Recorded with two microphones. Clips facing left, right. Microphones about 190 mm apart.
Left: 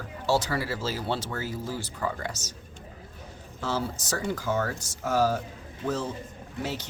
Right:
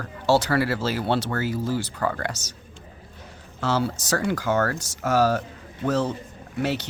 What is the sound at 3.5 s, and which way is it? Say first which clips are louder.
Speech: right 6 dB; 75° right (ahead or behind).